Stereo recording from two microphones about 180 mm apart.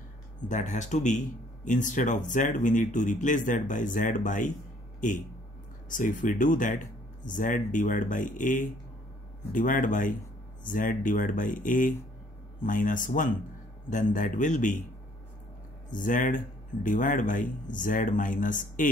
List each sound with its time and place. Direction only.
0.5 s speech: 40° left (ahead or behind)
5.9 s speech: 45° left (ahead or behind)
15.9 s speech: 45° left (ahead or behind)